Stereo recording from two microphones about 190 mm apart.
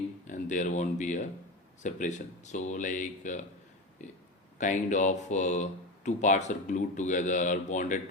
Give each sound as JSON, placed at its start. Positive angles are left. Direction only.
{"t": 0.3, "sound": "speech", "side_deg": 40}